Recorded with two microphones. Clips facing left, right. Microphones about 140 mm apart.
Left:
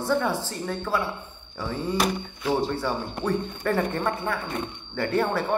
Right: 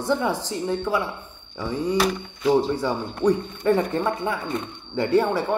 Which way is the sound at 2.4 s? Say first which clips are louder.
Right 5 dB; 15° right (ahead or behind).